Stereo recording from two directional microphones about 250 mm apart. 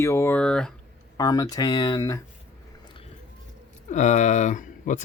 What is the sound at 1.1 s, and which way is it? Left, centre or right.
Speech, centre.